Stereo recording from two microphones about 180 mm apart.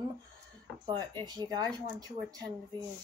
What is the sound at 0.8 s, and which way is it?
Speech, 25° right (ahead or behind).